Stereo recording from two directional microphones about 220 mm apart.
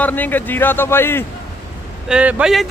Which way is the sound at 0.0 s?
10° left (ahead or behind).